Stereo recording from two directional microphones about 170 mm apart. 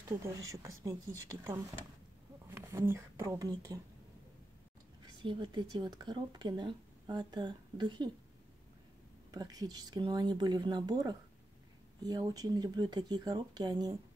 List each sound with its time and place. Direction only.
0.2 s speech: 20° right (ahead or behind)
2.5 s speech: 15° right (ahead or behind)
5.2 s speech: 25° right (ahead or behind)
9.3 s speech: 25° right (ahead or behind)